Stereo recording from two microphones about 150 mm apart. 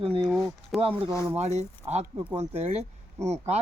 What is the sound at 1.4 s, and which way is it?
Speech, 45° right (ahead or behind).